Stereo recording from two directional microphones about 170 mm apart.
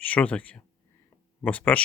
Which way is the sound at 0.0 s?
10° left (ahead or behind).